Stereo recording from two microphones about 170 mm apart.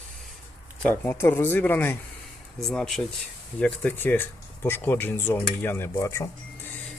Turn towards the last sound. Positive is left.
turn(degrees=15)  # may be behind; listen again after turning